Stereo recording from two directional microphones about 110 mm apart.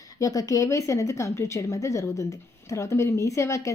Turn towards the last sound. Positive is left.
turn(degrees=30)  # may be behind; listen again after turning